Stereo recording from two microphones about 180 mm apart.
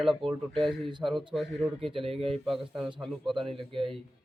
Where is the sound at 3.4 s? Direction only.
30° right (ahead or behind).